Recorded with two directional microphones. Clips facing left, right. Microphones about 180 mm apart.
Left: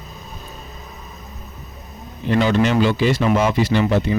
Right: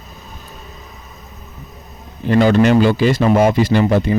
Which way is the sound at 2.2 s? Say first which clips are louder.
Right 5 dB; 45° right (ahead or behind).